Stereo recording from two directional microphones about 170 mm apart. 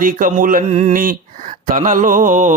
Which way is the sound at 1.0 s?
55° right (ahead or behind).